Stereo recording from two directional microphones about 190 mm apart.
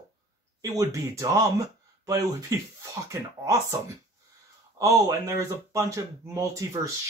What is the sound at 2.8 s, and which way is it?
Speech, 15° right (ahead or behind).